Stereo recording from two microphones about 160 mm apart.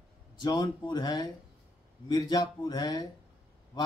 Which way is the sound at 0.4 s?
25° left (ahead or behind).